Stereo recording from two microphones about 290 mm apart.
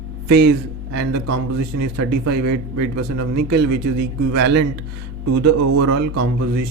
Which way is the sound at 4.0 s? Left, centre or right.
Right.